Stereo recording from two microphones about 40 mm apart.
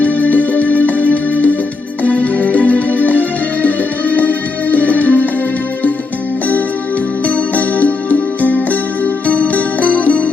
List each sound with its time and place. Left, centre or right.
0.0 s music: left
7.3 s music: left